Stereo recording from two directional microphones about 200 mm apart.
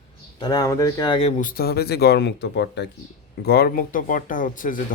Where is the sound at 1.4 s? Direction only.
45° left (ahead or behind).